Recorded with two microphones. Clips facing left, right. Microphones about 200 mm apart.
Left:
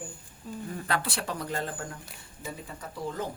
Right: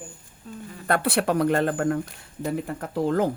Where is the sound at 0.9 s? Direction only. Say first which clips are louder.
Right 11 dB; 55° right (ahead or behind); by 3.3 s 75° right (ahead or behind).